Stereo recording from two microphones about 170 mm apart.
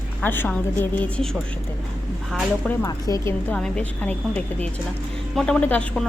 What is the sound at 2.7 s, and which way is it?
Speech, 20° left (ahead or behind).